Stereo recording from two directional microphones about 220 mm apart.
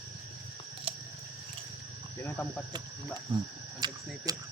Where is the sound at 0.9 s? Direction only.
25° right (ahead or behind).